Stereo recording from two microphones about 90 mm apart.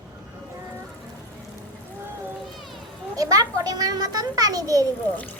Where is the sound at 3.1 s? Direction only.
40° right (ahead or behind).